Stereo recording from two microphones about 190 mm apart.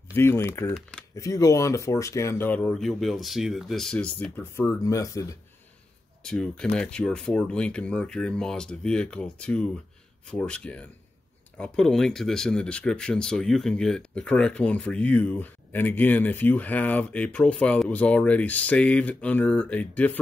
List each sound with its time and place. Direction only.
0.1 s speech: 15° left (ahead or behind)
6.2 s speech: 5° left (ahead or behind)